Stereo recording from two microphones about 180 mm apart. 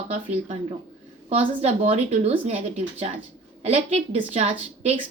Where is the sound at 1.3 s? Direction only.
35° right (ahead or behind).